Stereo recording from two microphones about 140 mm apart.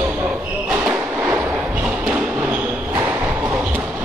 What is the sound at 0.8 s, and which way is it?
Train, 10° right (ahead or behind).